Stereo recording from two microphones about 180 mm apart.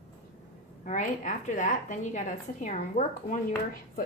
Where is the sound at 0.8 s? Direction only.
45° left (ahead or behind).